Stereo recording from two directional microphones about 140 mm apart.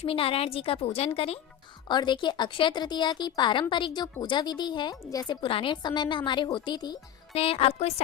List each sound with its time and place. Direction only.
0.0 s a woman's voice: 40° left (ahead or behind)
1.9 s speech: 30° left (ahead or behind)
7.3 s a woman's voice: 45° left (ahead or behind)